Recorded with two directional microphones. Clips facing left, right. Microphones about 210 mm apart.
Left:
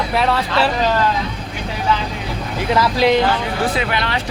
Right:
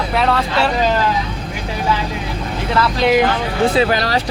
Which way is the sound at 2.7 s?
10° left (ahead or behind).